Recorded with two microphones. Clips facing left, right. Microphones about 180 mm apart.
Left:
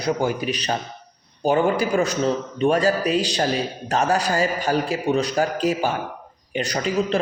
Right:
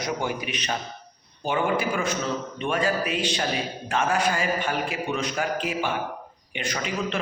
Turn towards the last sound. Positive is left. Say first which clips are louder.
# left 6 dB
turn(degrees=35)  # may be behind; listen again after turning